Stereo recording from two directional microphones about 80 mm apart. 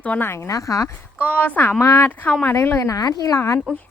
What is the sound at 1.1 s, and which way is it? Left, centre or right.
Speech, right.